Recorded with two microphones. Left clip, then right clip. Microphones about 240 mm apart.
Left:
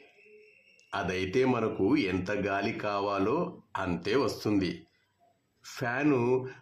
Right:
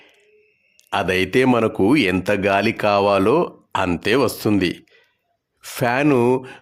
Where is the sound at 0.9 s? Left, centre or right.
Right.